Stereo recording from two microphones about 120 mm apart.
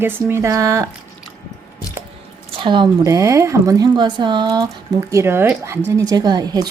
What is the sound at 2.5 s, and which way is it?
Speech, 45° right (ahead or behind).